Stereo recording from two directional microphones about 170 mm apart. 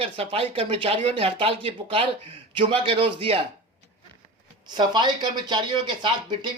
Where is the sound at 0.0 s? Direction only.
35° right (ahead or behind).